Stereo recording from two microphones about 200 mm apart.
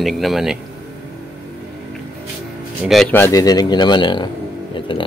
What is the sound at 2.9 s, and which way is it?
Speech, 5° left (ahead or behind).